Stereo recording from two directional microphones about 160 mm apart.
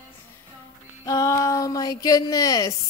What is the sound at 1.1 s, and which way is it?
A woman's voice, 20° left (ahead or behind).